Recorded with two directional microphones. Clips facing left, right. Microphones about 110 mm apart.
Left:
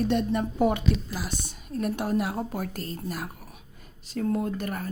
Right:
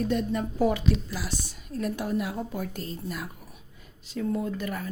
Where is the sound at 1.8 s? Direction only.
65° left (ahead or behind).